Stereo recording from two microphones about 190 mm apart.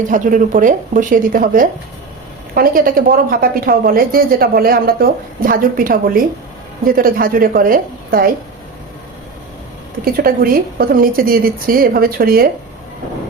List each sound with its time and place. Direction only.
0.1 s a woman's voice: 45° right (ahead or behind)
10.0 s a woman's voice: 50° right (ahead or behind)